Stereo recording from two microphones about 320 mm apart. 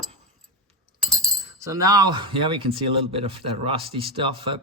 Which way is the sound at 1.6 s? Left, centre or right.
Centre.